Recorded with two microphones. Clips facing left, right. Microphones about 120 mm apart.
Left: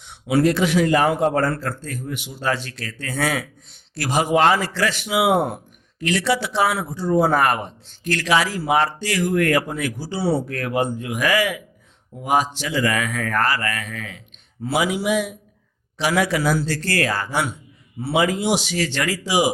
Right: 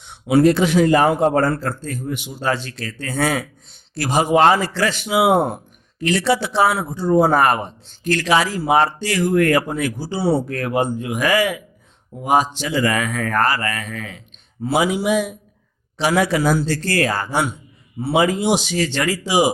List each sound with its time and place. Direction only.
0.0 s a man's voice: 25° right (ahead or behind)